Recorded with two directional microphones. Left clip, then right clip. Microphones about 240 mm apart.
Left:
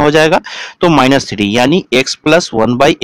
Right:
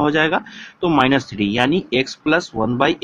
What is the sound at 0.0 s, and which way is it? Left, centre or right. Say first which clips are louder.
Speech: left 8 dB; left.